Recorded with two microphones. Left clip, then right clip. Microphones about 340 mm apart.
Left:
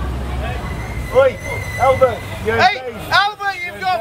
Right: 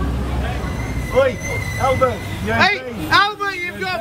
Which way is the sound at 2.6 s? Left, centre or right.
Centre.